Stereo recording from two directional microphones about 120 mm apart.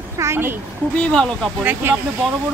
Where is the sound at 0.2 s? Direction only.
20° right (ahead or behind).